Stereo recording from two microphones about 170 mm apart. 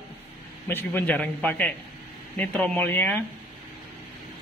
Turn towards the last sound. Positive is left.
turn(degrees=10)  # may be behind; listen again after turning